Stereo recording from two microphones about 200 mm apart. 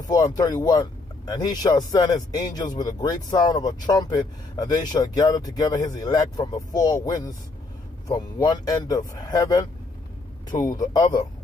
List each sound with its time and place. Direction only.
0.1 s speech: 20° left (ahead or behind)